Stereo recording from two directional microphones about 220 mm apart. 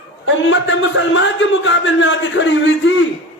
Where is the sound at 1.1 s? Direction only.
55° left (ahead or behind).